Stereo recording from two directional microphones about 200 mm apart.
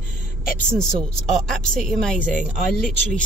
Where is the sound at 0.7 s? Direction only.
5° left (ahead or behind).